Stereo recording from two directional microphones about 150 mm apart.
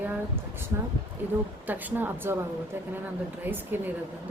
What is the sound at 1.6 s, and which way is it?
Speech, 10° right (ahead or behind).